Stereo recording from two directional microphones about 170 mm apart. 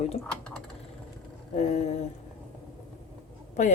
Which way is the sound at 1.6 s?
45° left (ahead or behind).